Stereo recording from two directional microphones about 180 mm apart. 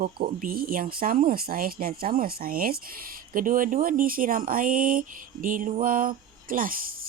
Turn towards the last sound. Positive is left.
turn(degrees=-55)  # may be behind; listen again after turning